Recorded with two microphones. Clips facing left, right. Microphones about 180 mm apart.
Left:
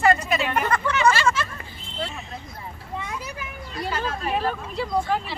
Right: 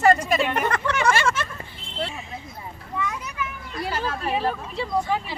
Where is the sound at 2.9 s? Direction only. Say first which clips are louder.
Right 3 dB; 25° left (ahead or behind).